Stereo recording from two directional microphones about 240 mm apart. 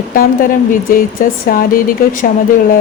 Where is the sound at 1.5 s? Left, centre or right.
Left.